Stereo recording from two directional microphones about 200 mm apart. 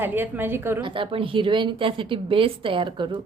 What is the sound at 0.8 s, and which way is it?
A woman's voice, 25° right (ahead or behind).